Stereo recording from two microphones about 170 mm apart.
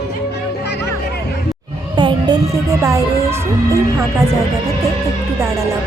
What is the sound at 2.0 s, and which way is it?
Music, 25° right (ahead or behind).